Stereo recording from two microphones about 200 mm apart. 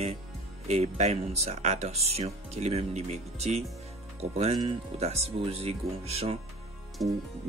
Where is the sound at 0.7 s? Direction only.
35° right (ahead or behind).